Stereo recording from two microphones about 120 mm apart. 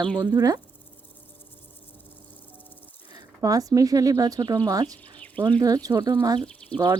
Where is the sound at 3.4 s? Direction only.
30° right (ahead or behind).